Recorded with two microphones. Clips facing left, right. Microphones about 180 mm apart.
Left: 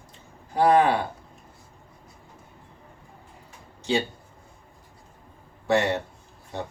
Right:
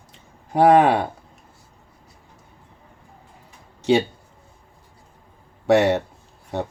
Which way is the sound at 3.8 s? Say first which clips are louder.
Right 7 dB; 65° right (ahead or behind).